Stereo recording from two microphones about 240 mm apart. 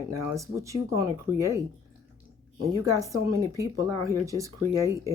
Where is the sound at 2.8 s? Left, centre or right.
Centre.